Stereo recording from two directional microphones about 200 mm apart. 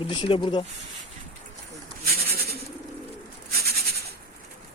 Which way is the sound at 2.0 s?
50° right (ahead or behind).